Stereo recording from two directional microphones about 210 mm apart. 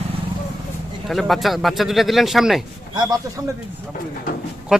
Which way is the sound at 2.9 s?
20° right (ahead or behind).